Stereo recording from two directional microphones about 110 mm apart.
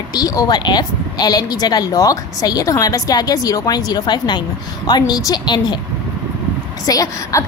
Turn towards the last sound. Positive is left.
turn(degrees=30)  # may be behind; listen again after turning